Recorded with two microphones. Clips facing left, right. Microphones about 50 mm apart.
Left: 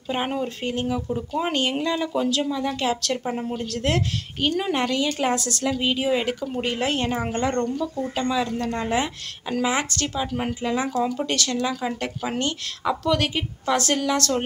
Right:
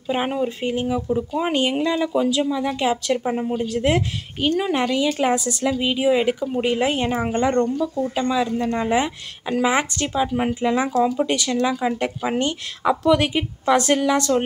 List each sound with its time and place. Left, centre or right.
0.1 s speech: centre